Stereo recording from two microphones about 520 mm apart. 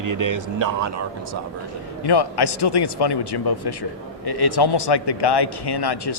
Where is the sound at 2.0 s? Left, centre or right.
Left.